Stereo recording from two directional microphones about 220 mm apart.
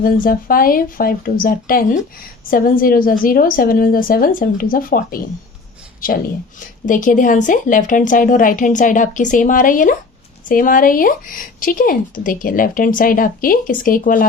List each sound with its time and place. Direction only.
0.0 s speech: 40° left (ahead or behind)